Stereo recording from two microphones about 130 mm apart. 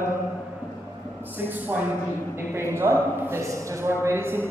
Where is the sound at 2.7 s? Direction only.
20° right (ahead or behind).